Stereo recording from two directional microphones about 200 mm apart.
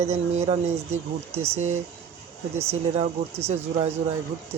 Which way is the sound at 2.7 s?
30° right (ahead or behind).